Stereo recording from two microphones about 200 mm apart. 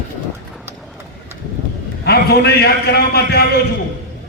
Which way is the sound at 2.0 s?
55° left (ahead or behind).